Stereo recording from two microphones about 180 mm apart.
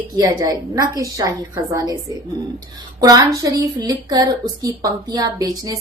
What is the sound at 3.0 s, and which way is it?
A woman's voice, 20° right (ahead or behind).